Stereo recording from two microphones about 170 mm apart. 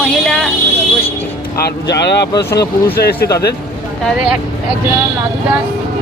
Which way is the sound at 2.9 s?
70° left (ahead or behind).